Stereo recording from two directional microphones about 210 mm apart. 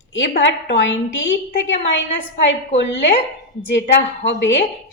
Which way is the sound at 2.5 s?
60° left (ahead or behind).